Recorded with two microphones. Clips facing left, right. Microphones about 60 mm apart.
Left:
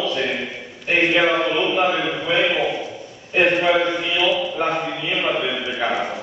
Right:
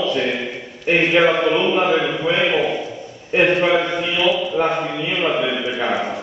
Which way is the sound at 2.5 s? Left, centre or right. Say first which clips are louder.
Right 2 dB; centre.